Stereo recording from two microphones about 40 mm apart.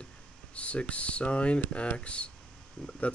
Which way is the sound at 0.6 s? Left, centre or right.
Left.